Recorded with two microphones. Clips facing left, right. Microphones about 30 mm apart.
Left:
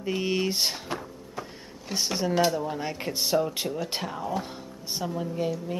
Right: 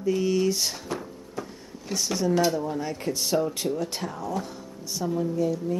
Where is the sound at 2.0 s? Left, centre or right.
Left.